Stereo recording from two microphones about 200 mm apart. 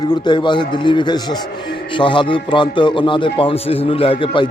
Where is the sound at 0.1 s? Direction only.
25° left (ahead or behind).